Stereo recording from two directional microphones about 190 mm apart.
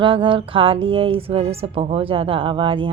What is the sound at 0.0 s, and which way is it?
Speech, 25° right (ahead or behind).